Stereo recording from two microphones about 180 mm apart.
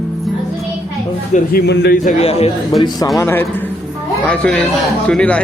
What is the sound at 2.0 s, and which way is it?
Speech, 35° left (ahead or behind).